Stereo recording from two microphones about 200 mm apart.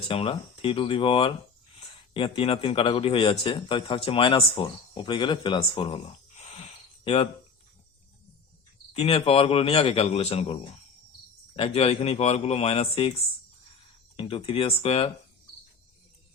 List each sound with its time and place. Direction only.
0.1 s a man's voice: 25° left (ahead or behind)
8.9 s a man's voice: 30° left (ahead or behind)